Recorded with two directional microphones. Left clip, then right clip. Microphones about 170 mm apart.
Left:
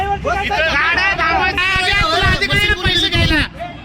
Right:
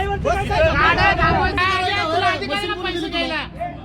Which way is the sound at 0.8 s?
10° left (ahead or behind).